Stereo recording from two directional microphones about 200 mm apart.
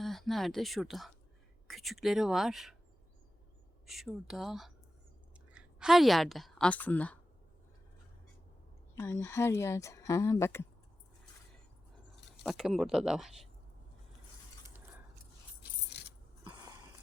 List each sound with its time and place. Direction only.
0.0 s speech: centre (ahead or behind)
3.8 s a woman's voice: centre (ahead or behind)
9.0 s speech: 15° left (ahead or behind)
12.4 s speech: centre (ahead or behind)
15.9 s coin: 55° left (ahead or behind)
16.4 s a sound: 20° right (ahead or behind)